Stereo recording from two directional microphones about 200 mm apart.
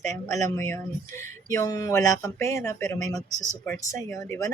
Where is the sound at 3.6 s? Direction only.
15° left (ahead or behind).